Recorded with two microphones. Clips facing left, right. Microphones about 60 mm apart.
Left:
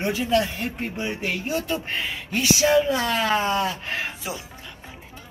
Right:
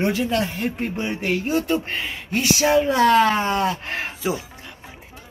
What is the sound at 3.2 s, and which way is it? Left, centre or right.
Speech, centre.